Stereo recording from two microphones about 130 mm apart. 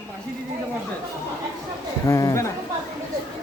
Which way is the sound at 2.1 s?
25° left (ahead or behind).